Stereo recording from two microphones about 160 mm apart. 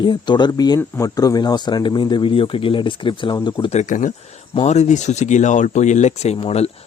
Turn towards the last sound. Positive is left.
turn(degrees=40)  # may be behind; listen again after turning